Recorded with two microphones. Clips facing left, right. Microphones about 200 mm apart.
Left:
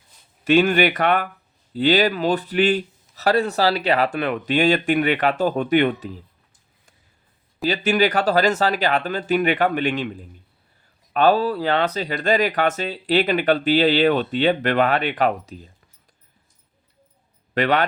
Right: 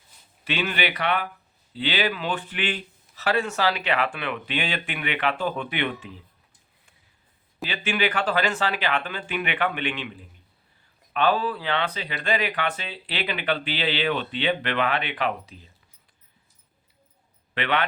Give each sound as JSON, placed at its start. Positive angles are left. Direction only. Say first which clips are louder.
{"t": 0.4, "sound": "speech", "louder": "left 11 dB", "side_deg": 45}
{"t": 7.6, "sound": "speech", "louder": "left 7 dB", "side_deg": 40}
{"t": 17.5, "sound": "speech", "louder": "left 6 dB", "side_deg": 40}